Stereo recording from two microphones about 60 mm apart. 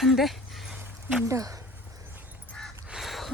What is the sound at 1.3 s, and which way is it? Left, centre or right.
Speech, right.